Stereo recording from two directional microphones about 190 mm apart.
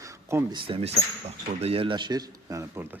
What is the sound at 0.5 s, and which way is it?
A man's voice, 30° right (ahead or behind).